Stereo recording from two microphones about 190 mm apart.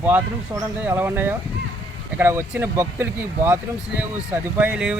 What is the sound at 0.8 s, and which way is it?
Speech, 10° right (ahead or behind).